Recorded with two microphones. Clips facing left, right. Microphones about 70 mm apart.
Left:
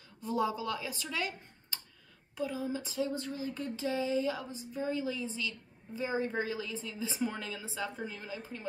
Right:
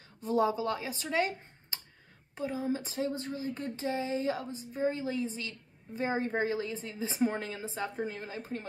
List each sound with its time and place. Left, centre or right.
0.2 s speech: right